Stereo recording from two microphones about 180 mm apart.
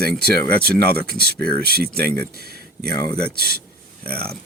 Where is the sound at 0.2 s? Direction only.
60° right (ahead or behind).